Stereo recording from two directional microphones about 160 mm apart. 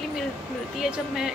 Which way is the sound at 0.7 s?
Centre (ahead or behind).